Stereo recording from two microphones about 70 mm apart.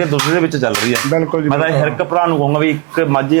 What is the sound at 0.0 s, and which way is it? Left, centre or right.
Speech, right.